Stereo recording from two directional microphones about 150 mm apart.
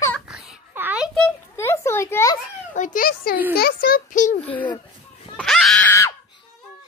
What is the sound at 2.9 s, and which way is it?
A child's voice, 80° left.